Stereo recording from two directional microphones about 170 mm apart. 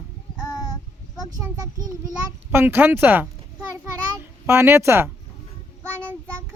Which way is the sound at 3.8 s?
15° right (ahead or behind).